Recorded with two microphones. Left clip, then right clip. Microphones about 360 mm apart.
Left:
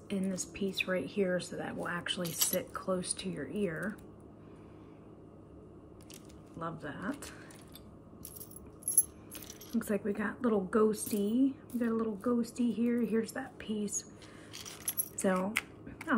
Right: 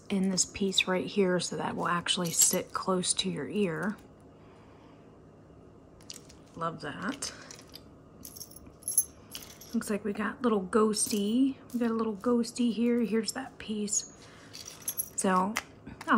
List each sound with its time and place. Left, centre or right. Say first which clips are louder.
0.1 s speech: right 7 dB; centre
6.6 s speech: right 5 dB; centre
9.3 s speech: right 1 dB; centre
15.2 s a sound: right 4 dB; centre